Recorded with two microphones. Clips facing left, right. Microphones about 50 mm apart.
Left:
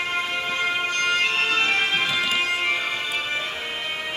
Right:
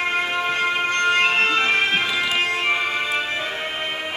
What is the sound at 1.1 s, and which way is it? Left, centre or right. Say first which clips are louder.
Music: right 5 dB; right.